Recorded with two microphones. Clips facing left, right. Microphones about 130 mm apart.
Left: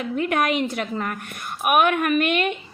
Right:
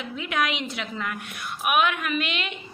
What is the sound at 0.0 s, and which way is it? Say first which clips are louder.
A woman's voice: left 5 dB; 50° left (ahead or behind).